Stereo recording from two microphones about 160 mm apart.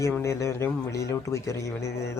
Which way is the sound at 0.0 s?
20° left (ahead or behind).